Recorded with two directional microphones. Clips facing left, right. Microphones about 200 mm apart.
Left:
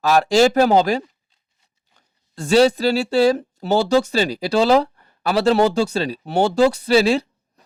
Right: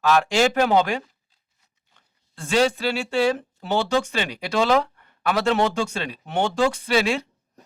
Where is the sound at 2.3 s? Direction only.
40° left (ahead or behind).